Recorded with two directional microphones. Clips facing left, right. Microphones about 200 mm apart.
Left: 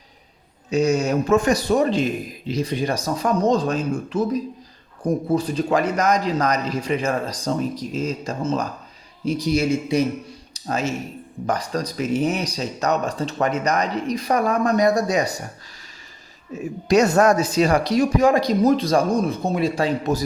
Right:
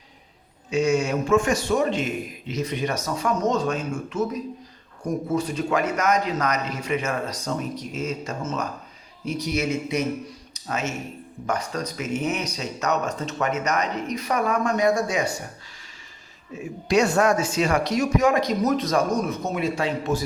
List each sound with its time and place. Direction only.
0.7 s speech: 40° left (ahead or behind)
16.5 s speech: 40° left (ahead or behind)